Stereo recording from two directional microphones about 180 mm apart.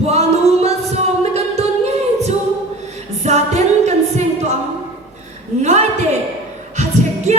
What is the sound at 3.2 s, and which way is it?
Music, 40° right (ahead or behind).